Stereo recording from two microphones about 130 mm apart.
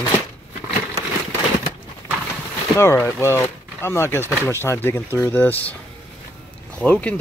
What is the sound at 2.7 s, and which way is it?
Speech, 20° left (ahead or behind).